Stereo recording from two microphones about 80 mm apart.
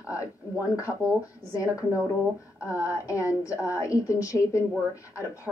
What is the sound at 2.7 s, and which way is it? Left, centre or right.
A woman's voice, left.